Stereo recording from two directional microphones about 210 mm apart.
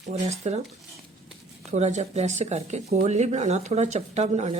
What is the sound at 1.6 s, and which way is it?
A woman's voice, 35° right (ahead or behind).